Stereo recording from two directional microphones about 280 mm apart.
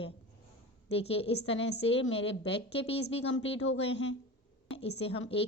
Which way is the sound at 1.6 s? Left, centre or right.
Left.